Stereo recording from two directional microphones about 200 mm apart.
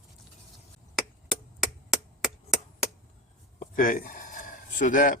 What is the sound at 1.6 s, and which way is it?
Chop, centre (ahead or behind).